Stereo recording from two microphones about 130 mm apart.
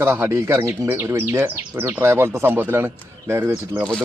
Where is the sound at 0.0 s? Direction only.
20° right (ahead or behind).